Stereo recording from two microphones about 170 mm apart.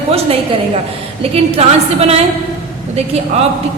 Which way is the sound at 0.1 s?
35° right (ahead or behind).